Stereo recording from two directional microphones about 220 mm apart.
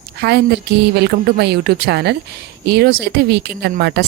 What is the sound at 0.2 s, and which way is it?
Speech, 50° right (ahead or behind).